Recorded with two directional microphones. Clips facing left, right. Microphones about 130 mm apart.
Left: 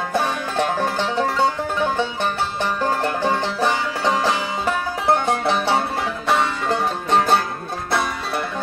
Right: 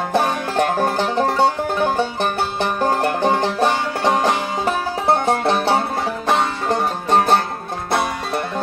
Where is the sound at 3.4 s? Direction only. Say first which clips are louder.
Right 3 dB; 20° right (ahead or behind).